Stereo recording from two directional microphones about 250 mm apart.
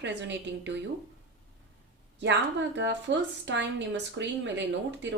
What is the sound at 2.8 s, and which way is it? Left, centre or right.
Speech, right.